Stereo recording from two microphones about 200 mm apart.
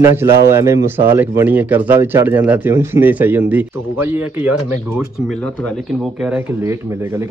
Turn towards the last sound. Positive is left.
turn(degrees=-5)  # may be behind; listen again after turning